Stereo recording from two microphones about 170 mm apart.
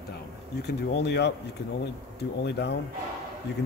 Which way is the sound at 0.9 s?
80° left.